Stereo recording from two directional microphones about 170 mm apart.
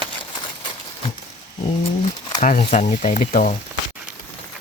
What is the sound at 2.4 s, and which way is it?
Speech, 45° left (ahead or behind).